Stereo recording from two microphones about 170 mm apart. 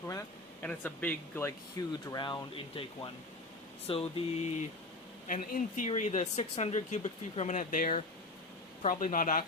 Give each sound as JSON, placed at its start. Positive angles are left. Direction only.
{"t": 0.1, "sound": "speech", "side_deg": 15}
{"t": 2.0, "sound": "speech", "side_deg": 25}
{"t": 3.8, "sound": "a sound", "side_deg": 35}
{"t": 5.3, "sound": "speech", "side_deg": 50}